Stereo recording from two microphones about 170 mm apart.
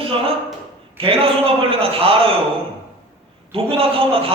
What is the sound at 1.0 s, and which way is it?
Speech, 35° right (ahead or behind).